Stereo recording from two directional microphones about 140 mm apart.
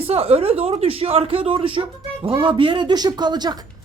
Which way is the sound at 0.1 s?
45° right (ahead or behind).